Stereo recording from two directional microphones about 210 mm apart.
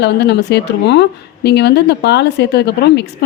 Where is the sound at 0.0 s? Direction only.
55° left (ahead or behind).